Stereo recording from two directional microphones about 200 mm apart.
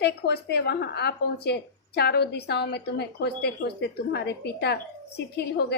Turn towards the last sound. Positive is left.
turn(degrees=55)  # may be behind; listen again after turning